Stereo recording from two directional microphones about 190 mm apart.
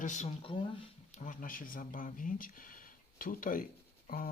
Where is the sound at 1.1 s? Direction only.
45° left (ahead or behind).